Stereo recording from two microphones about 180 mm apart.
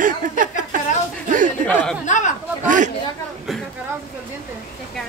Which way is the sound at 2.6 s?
45° right (ahead or behind).